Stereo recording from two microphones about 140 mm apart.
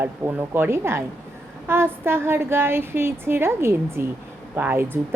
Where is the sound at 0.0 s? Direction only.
15° right (ahead or behind).